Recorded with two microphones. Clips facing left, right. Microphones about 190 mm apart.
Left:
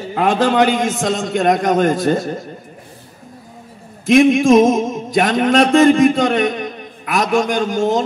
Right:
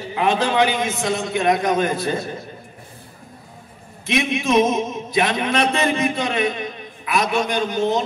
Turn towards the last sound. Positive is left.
turn(degrees=45)  # may be behind; listen again after turning